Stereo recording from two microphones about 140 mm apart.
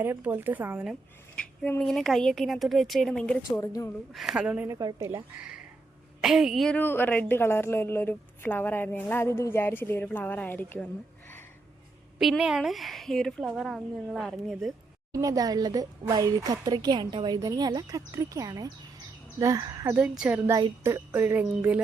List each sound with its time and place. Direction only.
0.0 s speech: 15° right (ahead or behind)
1.8 s a woman's voice: centre (ahead or behind)
3.5 s a woman's voice: 25° left (ahead or behind)
4.1 s speech: centre (ahead or behind)
4.7 s speech: 25° right (ahead or behind)
5.4 s a woman's voice: 5° right (ahead or behind)
6.7 s a woman's voice: 15° left (ahead or behind)
12.2 s a woman's voice: centre (ahead or behind)
15.1 s speech: 25° right (ahead or behind)
20.0 s speech: 10° right (ahead or behind)
20.5 s speech: 20° right (ahead or behind)